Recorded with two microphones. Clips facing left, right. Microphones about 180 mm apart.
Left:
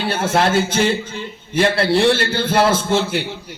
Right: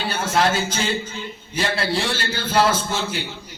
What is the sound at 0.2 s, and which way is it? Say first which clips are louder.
A man's voice: left 3 dB; 55° left (ahead or behind).